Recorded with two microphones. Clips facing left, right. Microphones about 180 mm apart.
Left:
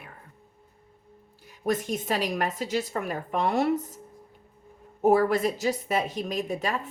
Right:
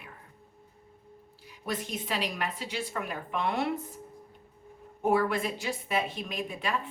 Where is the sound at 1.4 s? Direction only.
45° left (ahead or behind).